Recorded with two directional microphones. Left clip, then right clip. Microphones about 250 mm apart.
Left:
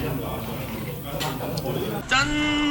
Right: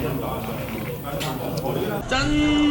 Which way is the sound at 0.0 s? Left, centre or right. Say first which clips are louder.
Right 3 dB; centre.